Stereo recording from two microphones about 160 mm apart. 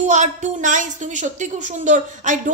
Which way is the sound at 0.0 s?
50° right (ahead or behind).